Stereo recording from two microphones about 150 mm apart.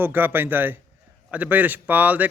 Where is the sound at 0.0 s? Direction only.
15° right (ahead or behind).